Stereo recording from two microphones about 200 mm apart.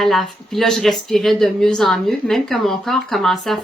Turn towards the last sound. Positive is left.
turn(degrees=0)  # may be behind; listen again after turning